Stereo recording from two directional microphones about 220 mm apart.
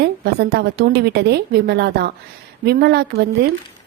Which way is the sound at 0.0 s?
50° right (ahead or behind).